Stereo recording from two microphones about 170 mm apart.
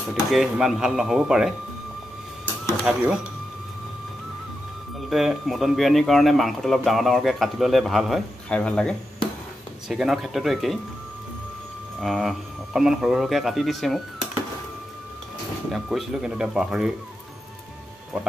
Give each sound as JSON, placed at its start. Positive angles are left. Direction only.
{"t": 0.1, "sound": "speech", "side_deg": 0}
{"t": 2.8, "sound": "speech", "side_deg": -5}
{"t": 5.1, "sound": "speech", "side_deg": 0}
{"t": 12.0, "sound": "speech", "side_deg": 0}
{"t": 15.7, "sound": "speech", "side_deg": 0}